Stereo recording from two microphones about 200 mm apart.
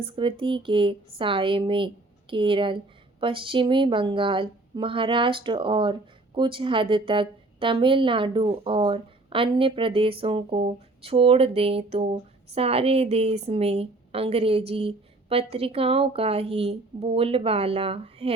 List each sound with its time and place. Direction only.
0.0 s a woman's voice: 25° right (ahead or behind)